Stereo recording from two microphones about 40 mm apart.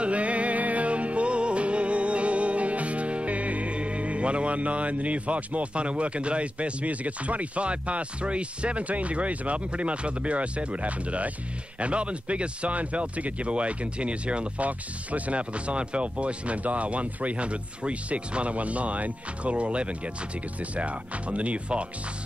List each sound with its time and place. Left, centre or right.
0.0 s music: right
11.8 s speech: right